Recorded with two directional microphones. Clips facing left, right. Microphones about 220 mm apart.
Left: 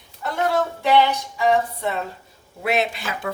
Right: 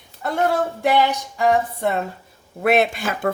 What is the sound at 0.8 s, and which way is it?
A woman's voice, 50° right (ahead or behind).